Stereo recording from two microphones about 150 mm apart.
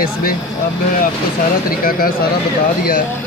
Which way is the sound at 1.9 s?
75° left (ahead or behind).